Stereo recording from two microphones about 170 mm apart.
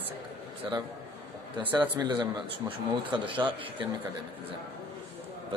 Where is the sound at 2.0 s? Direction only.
25° right (ahead or behind).